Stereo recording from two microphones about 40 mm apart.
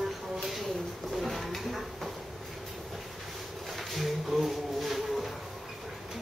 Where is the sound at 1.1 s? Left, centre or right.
Centre.